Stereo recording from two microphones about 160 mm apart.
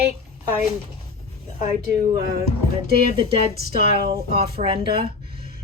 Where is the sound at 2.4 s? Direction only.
75° right (ahead or behind).